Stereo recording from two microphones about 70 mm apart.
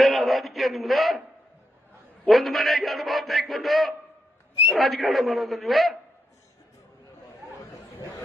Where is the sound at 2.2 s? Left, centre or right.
Centre.